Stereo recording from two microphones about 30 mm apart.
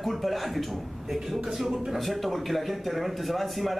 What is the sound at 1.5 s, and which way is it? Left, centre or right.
Speech, centre.